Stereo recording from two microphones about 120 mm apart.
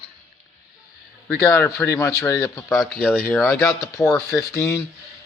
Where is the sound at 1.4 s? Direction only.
25° left (ahead or behind).